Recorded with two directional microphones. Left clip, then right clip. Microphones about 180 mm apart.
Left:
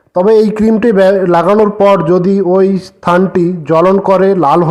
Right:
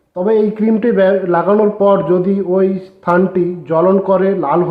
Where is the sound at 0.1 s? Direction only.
35° left (ahead or behind).